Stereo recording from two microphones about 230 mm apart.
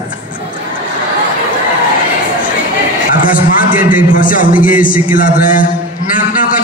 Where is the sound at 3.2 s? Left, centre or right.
Left.